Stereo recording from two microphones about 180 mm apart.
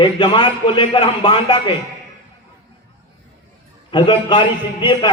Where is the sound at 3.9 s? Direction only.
25° left (ahead or behind).